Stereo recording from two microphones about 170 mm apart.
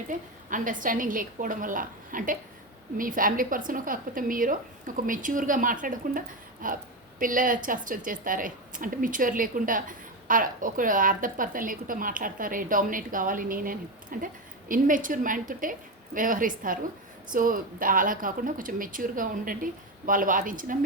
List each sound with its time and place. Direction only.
0.1 s a woman's voice: 50° right (ahead or behind)